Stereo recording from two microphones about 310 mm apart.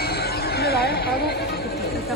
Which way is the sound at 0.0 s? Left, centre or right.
Left.